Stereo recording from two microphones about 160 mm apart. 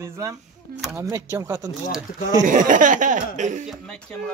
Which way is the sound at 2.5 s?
55° right (ahead or behind).